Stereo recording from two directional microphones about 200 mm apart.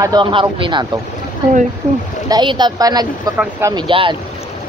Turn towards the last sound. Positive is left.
turn(degrees=-25)  # may be behind; listen again after turning